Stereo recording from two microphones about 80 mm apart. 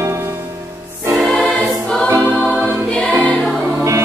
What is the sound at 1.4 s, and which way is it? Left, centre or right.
Choir, centre.